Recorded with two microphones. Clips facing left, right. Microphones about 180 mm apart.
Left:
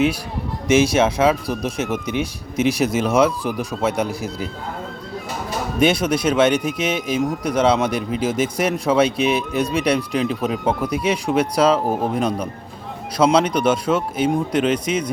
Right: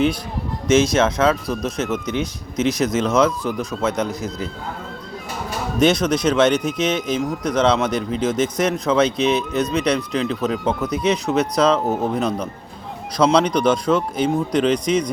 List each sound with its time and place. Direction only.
0.7 s speech: 10° left (ahead or behind)
5.8 s speech: 10° left (ahead or behind)